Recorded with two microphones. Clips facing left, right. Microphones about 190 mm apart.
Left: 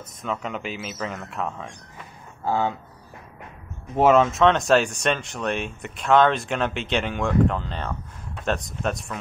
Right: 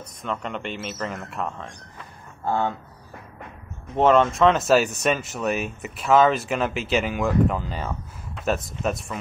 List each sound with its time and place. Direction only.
0.2 s speech: 5° left (ahead or behind)
3.9 s speech: 5° left (ahead or behind)